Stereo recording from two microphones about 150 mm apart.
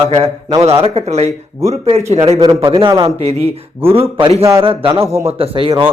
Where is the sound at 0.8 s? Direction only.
40° right (ahead or behind).